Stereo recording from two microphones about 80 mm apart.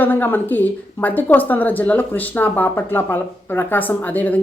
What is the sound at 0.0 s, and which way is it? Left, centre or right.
A woman's voice, left.